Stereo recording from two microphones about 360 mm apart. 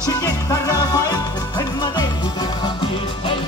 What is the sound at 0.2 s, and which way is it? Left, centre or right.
Music, centre.